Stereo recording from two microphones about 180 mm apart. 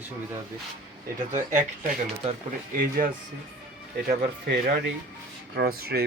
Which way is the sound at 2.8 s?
50° right (ahead or behind).